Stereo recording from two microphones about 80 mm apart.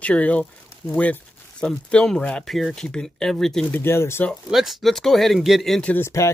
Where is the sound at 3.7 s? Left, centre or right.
Left.